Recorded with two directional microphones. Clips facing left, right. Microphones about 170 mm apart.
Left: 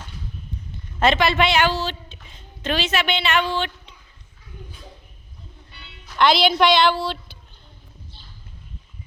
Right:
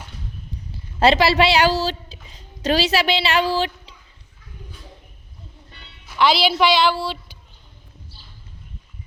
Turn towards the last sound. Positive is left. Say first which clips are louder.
# even
turn(degrees=-10)  # may be behind; listen again after turning